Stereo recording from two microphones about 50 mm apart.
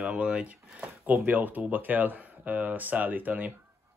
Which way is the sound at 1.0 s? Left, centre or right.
Right.